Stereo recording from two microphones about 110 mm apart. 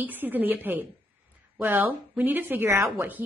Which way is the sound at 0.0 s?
15° right (ahead or behind).